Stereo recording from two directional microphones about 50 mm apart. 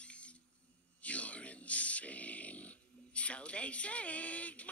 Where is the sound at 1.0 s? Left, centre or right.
Left.